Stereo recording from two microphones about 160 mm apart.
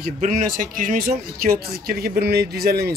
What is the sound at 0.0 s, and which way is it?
A man's voice, 55° right (ahead or behind).